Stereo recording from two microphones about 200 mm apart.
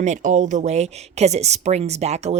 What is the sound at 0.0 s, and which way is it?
A woman's voice, 40° right (ahead or behind).